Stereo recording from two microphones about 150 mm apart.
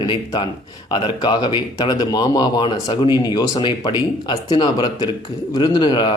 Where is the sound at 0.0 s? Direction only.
30° left (ahead or behind).